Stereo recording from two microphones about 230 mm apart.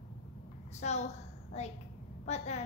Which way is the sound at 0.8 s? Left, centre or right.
Left.